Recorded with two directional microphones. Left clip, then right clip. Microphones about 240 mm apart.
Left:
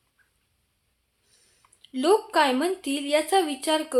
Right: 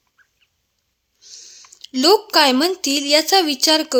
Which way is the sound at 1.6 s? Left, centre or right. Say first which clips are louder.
Right 8 dB; right.